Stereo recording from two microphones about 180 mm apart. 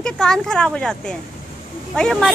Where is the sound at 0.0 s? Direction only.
5° left (ahead or behind).